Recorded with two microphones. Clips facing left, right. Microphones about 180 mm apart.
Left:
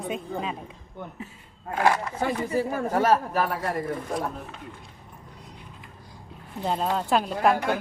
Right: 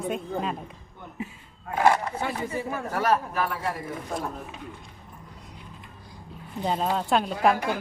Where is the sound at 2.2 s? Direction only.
40° left (ahead or behind).